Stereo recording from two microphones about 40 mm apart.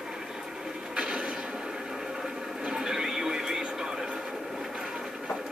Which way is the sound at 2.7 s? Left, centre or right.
Centre.